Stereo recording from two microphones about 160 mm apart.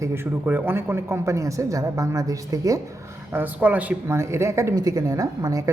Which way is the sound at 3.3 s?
10° right (ahead or behind).